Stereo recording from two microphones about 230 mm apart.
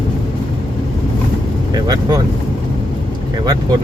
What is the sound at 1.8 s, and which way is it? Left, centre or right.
Speech, centre.